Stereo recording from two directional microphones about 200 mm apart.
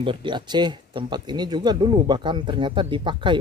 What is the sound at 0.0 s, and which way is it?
Speech, 25° right (ahead or behind).